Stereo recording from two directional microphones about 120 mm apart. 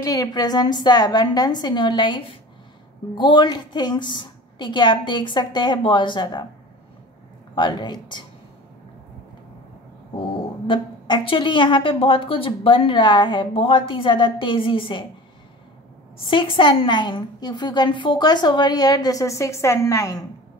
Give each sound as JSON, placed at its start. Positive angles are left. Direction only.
{"t": 0.0, "sound": "a woman's voice", "side_deg": 30}
{"t": 7.5, "sound": "a woman's voice", "side_deg": 40}
{"t": 10.7, "sound": "a woman's voice", "side_deg": 45}
{"t": 16.3, "sound": "a woman's voice", "side_deg": 45}